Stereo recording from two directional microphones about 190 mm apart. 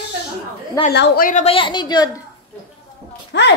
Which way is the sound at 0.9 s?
60° left (ahead or behind).